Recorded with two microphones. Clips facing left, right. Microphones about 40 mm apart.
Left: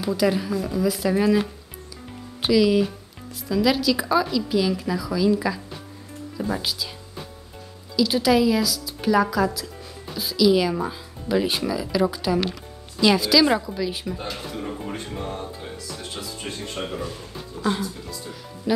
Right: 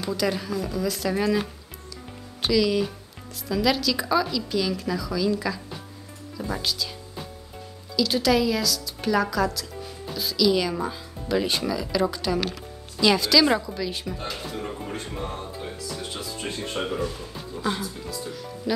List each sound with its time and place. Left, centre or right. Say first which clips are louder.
0.0 s a woman's voice: left 4 dB; centre
7.9 s speech: left 2 dB; centre
14.5 s speech: left 1 dB; centre
16.4 s speech: right 3 dB; right
17.6 s speech: left 3 dB; centre